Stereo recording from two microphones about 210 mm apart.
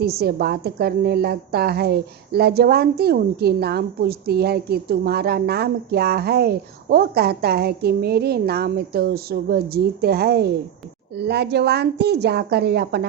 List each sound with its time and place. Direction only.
0.0 s a woman's voice: 50° right (ahead or behind)